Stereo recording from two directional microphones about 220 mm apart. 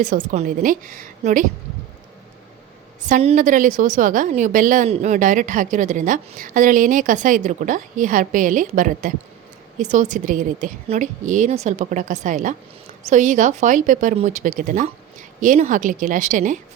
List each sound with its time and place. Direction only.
0.0 s a woman's voice: 35° right (ahead or behind)
3.1 s a woman's voice: 30° right (ahead or behind)